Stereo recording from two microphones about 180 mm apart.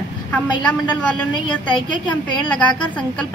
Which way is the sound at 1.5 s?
25° left (ahead or behind).